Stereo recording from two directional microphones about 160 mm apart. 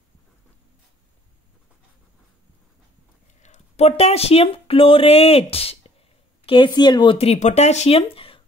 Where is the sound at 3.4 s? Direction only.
45° left (ahead or behind).